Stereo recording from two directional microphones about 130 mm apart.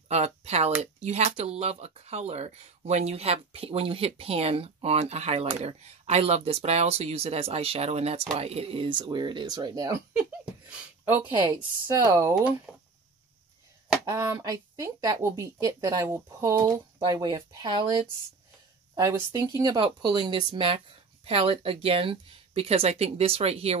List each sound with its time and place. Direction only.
0.1 s speech: 55° right (ahead or behind); by 10.0 s 30° right (ahead or behind)
10.1 s a sound: 10° right (ahead or behind)
11.4 s speech: 30° right (ahead or behind)
12.7 s a sound: 5° right (ahead or behind)
14.0 s speech: 25° right (ahead or behind)
18.9 s speech: 25° right (ahead or behind); by 23.8 s 50° right (ahead or behind)